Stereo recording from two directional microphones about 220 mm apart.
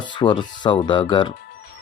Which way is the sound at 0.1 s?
20° left (ahead or behind).